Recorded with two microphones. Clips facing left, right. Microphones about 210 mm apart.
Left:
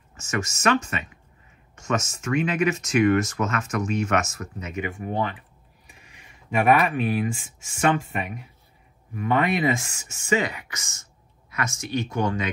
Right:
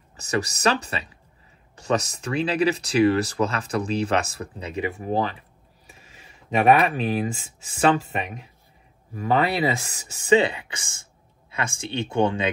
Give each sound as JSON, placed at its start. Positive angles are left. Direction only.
{"t": 0.1, "sound": "speech", "side_deg": -35}
{"t": 6.8, "sound": "speech", "side_deg": -30}
{"t": 9.1, "sound": "speech", "side_deg": -30}